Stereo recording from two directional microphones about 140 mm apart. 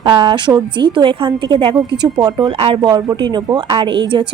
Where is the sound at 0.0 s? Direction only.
35° right (ahead or behind).